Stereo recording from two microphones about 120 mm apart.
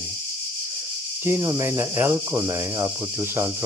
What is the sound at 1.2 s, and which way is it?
Cricket, 25° right (ahead or behind).